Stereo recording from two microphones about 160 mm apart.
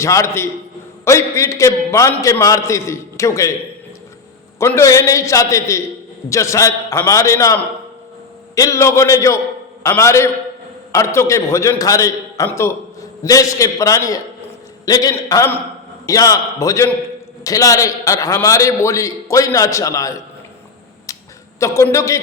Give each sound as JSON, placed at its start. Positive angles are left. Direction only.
{"t": 0.0, "sound": "a man's voice", "side_deg": 20}
{"t": 4.6, "sound": "a man's voice", "side_deg": 20}
{"t": 21.1, "sound": "a sound", "side_deg": 20}
{"t": 21.6, "sound": "a man's voice", "side_deg": 20}